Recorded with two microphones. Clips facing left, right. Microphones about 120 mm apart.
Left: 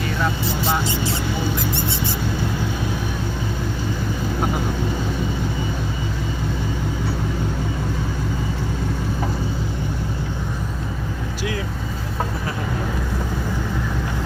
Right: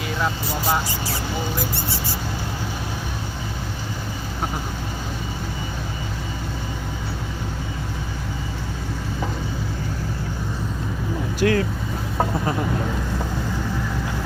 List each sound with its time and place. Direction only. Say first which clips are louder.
11.3 s vehicle: right 9 dB; 55° right (ahead or behind)